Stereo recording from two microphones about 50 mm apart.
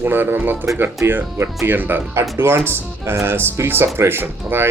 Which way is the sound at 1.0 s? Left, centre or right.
Right.